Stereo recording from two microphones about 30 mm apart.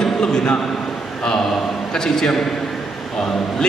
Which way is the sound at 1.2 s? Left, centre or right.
Centre.